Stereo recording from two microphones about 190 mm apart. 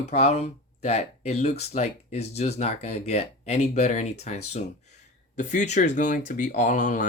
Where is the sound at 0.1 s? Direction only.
35° left (ahead or behind).